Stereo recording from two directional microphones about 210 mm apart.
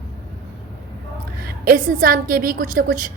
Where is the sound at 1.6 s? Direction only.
40° right (ahead or behind).